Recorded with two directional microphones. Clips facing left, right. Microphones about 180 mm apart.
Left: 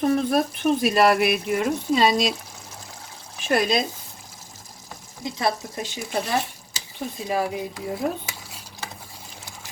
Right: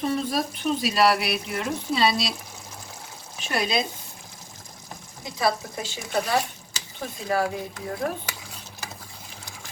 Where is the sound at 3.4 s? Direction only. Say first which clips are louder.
Left 5 dB; 45° left (ahead or behind).